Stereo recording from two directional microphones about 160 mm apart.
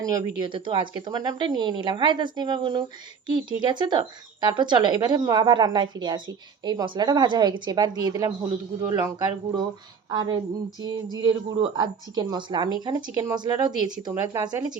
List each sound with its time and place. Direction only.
0.0 s a woman's voice: 25° right (ahead or behind)